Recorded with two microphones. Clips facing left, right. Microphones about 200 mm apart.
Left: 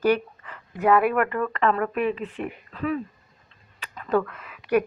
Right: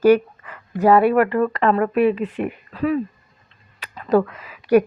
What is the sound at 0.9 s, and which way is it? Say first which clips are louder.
Speech: right 6 dB; 30° right (ahead or behind).